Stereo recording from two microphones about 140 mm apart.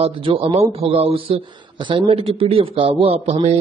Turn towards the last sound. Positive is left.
turn(degrees=-50)  # may be behind; listen again after turning